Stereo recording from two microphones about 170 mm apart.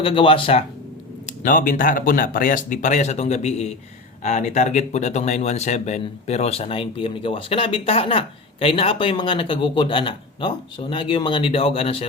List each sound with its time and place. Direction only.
0.0 s speech: 30° left (ahead or behind)
1.3 s speech: 50° left (ahead or behind)